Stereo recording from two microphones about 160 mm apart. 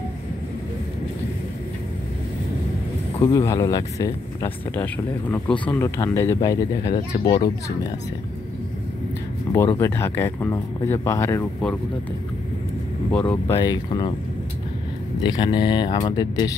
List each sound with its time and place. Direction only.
3.3 s speech: 20° left (ahead or behind)
4.8 s speech: 10° left (ahead or behind)
9.8 s speech: 15° left (ahead or behind)
13.1 s speech: 10° left (ahead or behind)
13.6 s speech: 25° left (ahead or behind)
15.2 s speech: 30° left (ahead or behind)